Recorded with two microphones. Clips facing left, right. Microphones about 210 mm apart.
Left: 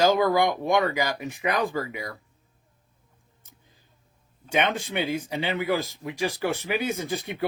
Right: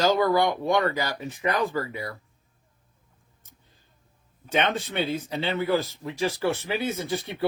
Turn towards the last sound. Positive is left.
turn(degrees=15)  # may be behind; listen again after turning